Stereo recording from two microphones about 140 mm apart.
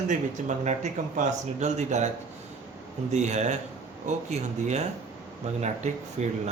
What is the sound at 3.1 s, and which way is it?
Speech, 55° right (ahead or behind).